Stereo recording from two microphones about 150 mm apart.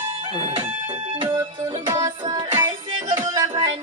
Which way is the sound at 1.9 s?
30° right (ahead or behind).